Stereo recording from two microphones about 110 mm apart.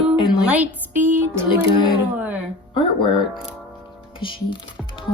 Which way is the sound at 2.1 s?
15° right (ahead or behind).